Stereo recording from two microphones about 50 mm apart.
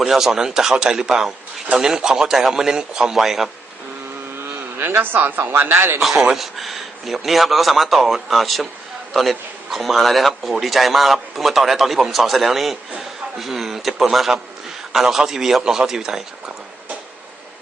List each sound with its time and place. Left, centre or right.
0.0 s a man's voice: centre
4.9 s speech: right
6.0 s a man's voice: centre